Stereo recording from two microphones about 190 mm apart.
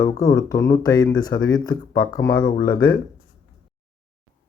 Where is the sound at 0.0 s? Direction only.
20° left (ahead or behind).